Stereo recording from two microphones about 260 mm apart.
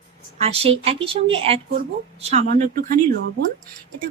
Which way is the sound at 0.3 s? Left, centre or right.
Right.